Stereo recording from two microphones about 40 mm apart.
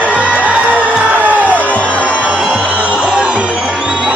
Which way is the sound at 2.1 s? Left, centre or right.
Right.